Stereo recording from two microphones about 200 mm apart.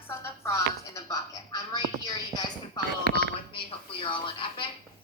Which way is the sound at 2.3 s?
20° left (ahead or behind).